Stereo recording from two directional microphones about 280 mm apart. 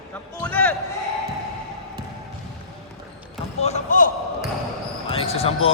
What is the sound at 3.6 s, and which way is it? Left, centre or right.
Speech, left.